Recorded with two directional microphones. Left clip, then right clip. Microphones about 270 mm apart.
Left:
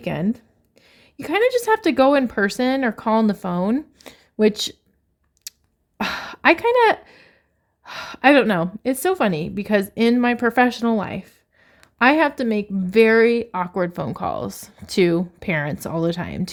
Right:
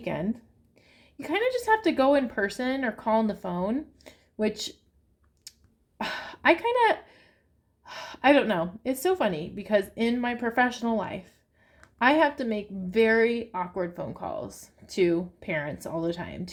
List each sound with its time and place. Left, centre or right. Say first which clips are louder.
0.0 s a woman's voice: left 6 dB; left
6.0 s a sound: left 7 dB; left
7.9 s a woman's voice: left 6 dB; left